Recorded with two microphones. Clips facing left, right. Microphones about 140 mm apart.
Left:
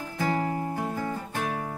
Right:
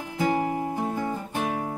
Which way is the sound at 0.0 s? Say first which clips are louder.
Right 3 dB; 15° right (ahead or behind).